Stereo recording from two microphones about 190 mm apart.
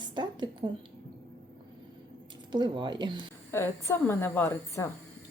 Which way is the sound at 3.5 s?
10° left (ahead or behind).